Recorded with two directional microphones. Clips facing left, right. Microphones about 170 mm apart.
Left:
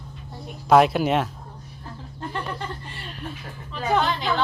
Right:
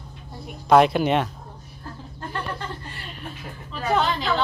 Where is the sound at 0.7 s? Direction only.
Centre (ahead or behind).